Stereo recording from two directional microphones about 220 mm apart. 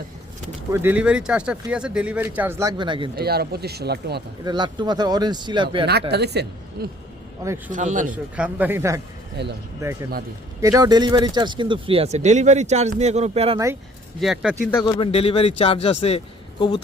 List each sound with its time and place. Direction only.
0.7 s speech: 10° right (ahead or behind)
3.2 s speech: 45° right (ahead or behind)
4.4 s speech: 20° right (ahead or behind)
5.8 s speech: 50° right (ahead or behind)
7.7 s speech: 35° right (ahead or behind)
8.1 s speech: 5° right (ahead or behind)
9.4 s speech: 50° right (ahead or behind)
9.8 s speech: 15° right (ahead or behind)
14.2 s speech: centre (ahead or behind)
14.7 s speech: 10° left (ahead or behind)
14.9 s a man's voice: 25° left (ahead or behind)